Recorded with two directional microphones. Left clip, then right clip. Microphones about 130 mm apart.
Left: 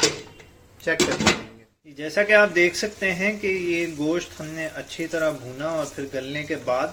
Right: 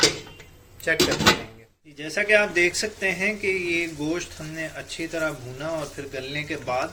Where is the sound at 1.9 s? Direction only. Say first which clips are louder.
Left 3 dB; 50° left (ahead or behind).